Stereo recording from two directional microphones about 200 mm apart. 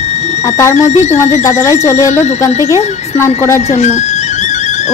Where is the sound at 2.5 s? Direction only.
15° right (ahead or behind).